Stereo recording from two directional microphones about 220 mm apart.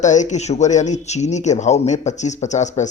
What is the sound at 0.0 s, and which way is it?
Speech, 35° left (ahead or behind).